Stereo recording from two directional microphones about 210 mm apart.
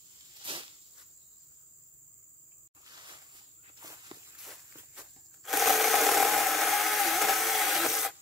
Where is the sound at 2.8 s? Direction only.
20° right (ahead or behind).